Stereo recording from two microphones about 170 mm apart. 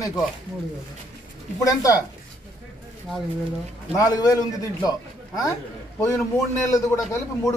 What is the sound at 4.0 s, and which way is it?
Speech, 20° left (ahead or behind).